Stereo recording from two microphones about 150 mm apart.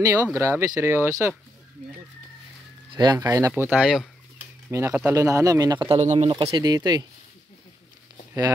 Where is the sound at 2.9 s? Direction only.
25° right (ahead or behind); by 4.1 s centre (ahead or behind).